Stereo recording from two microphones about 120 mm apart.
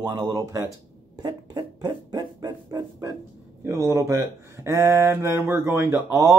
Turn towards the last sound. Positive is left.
turn(degrees=-25)  # may be behind; listen again after turning